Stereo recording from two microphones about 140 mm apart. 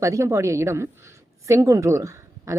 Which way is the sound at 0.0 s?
20° right (ahead or behind).